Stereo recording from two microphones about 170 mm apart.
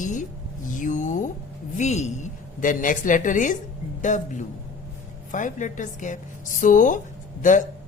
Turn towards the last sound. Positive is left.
turn(degrees=50)  # may be behind; listen again after turning